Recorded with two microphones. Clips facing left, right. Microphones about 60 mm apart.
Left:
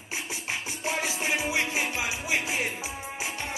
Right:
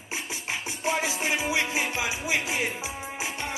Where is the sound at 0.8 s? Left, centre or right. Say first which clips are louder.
Right 2 dB; right.